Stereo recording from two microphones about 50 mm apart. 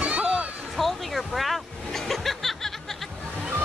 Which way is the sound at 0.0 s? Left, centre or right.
Right.